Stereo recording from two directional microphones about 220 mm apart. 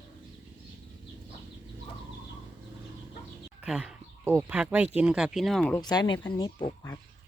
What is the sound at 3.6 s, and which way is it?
Speech, 5° right (ahead or behind).